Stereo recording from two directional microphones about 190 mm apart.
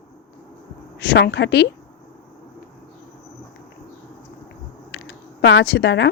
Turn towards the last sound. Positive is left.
turn(degrees=65)  # may be behind; listen again after turning